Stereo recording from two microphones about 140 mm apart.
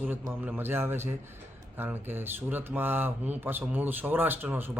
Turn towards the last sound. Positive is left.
turn(degrees=-15)  # may be behind; listen again after turning